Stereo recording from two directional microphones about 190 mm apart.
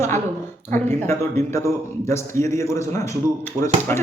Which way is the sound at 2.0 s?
15° left (ahead or behind).